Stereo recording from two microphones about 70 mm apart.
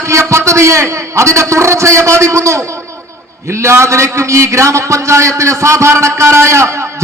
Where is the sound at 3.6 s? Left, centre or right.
Right.